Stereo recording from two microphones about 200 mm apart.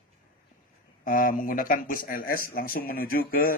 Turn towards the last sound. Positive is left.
turn(degrees=45)  # may be behind; listen again after turning